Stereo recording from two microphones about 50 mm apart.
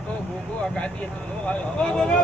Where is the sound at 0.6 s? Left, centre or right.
Centre.